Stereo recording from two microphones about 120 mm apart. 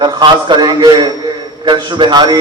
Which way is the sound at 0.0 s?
40° right (ahead or behind).